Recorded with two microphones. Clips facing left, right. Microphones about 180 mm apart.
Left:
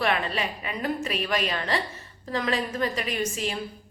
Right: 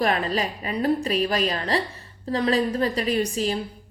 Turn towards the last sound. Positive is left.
turn(degrees=-35)  # may be behind; listen again after turning